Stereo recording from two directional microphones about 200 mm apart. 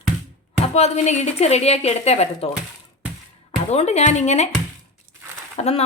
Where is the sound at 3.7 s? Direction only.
35° left (ahead or behind).